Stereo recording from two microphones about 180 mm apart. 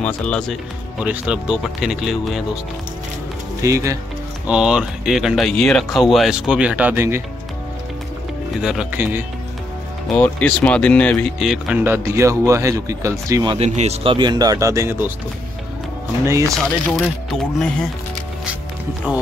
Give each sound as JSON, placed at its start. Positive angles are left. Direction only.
{"t": 0.0, "sound": "speech", "side_deg": 5}
{"t": 1.0, "sound": "speech", "side_deg": -5}
{"t": 3.6, "sound": "speech", "side_deg": -15}
{"t": 4.5, "sound": "speech", "side_deg": -5}
{"t": 8.5, "sound": "speech", "side_deg": -5}
{"t": 10.1, "sound": "speech", "side_deg": 10}
{"t": 13.6, "sound": "speech", "side_deg": -40}
{"t": 16.9, "sound": "speech", "side_deg": 5}
{"t": 19.1, "sound": "speech", "side_deg": -5}